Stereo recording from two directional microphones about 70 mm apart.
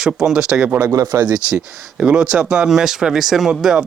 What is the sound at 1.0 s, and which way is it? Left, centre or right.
Speech, right.